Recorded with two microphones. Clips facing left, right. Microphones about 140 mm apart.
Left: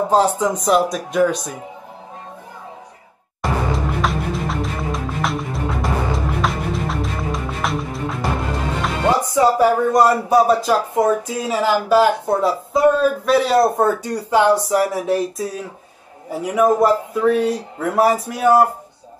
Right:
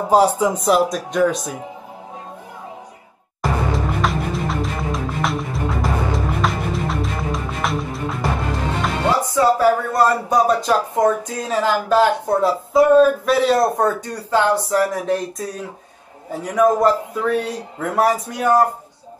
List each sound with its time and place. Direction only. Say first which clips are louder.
0.1 s speech: right 4 dB; 10° right (ahead or behind)
3.4 s music: even; centre (ahead or behind)
9.3 s speech: even; 15° left (ahead or behind)
10.3 s speech: left 2 dB; 5° left (ahead or behind)